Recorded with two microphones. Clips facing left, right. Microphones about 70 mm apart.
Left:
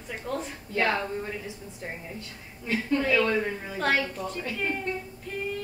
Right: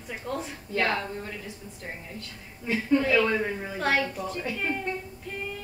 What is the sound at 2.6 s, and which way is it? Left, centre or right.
A woman's voice, centre.